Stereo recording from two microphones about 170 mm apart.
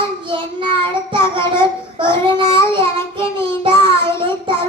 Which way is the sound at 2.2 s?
30° right (ahead or behind).